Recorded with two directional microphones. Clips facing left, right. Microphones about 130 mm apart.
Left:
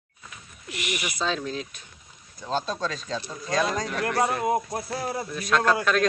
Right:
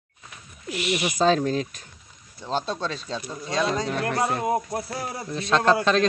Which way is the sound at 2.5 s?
30° right (ahead or behind).